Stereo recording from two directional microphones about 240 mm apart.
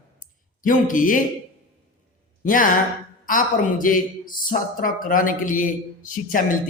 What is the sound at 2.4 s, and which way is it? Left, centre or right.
Speech, left.